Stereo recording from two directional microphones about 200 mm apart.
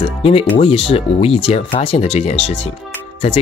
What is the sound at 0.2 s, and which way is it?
Speech, 30° left (ahead or behind).